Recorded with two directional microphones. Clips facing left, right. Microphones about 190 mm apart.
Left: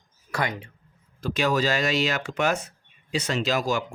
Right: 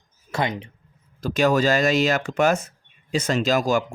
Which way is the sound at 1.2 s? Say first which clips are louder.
Right 5 dB; 45° right (ahead or behind).